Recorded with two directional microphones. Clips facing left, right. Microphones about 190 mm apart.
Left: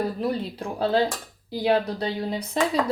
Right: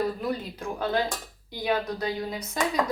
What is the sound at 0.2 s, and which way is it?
Speech, 30° left (ahead or behind).